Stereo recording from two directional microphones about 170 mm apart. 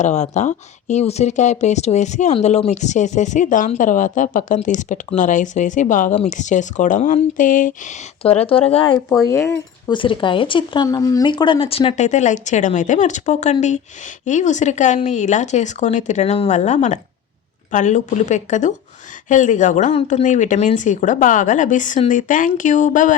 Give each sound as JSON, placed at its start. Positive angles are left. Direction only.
{"t": 0.0, "sound": "speech", "side_deg": 45}
{"t": 8.2, "sound": "speech", "side_deg": 35}
{"t": 9.2, "sound": "speech", "side_deg": 20}
{"t": 9.9, "sound": "speech", "side_deg": 30}
{"t": 10.8, "sound": "speech", "side_deg": 20}